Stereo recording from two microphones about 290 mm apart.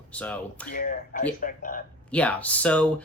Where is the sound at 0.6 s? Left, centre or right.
Left.